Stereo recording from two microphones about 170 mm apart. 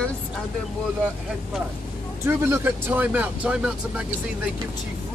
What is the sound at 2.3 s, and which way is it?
Speech, 15° right (ahead or behind).